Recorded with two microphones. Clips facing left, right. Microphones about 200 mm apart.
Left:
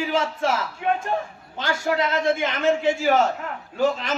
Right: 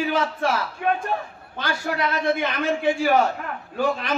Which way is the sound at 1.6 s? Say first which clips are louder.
Left 2 dB; 25° left (ahead or behind).